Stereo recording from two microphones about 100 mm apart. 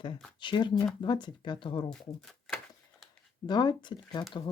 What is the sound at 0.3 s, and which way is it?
Speech, 50° left (ahead or behind).